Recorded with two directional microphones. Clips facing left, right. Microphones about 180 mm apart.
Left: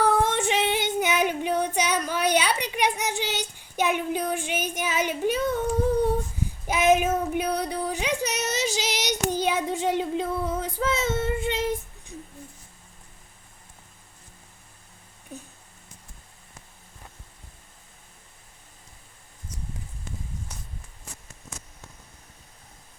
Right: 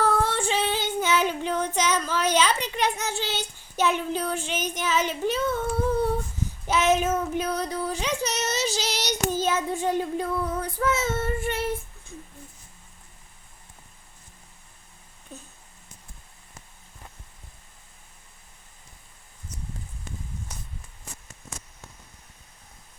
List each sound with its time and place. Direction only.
0.0 s child singing: 20° left (ahead or behind)
6.7 s child singing: 15° left (ahead or behind)
10.0 s female singing: 20° left (ahead or behind)
10.8 s child singing: 20° left (ahead or behind)